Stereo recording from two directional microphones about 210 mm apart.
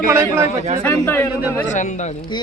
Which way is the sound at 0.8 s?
10° left (ahead or behind).